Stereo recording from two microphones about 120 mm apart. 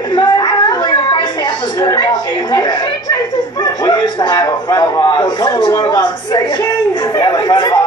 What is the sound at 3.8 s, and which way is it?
A man's voice, 35° left (ahead or behind).